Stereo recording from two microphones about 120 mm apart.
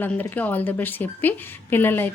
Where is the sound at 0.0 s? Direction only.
15° left (ahead or behind).